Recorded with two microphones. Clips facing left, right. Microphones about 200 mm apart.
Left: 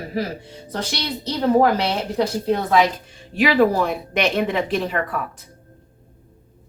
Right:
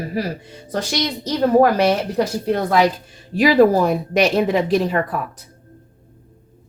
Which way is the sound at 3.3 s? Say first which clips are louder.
Right 4 dB; 40° right (ahead or behind).